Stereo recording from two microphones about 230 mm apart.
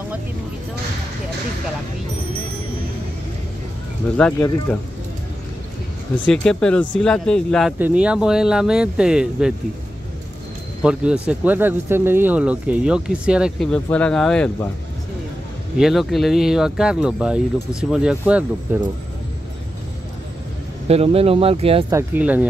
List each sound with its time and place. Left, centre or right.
4.2 s speech: centre
6.2 s speech: centre
10.8 s speech: centre
15.8 s speech: centre
20.9 s speech: right
21.9 s speech: centre